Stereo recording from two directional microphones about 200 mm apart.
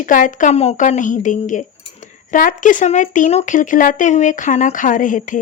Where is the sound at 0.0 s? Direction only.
40° left (ahead or behind).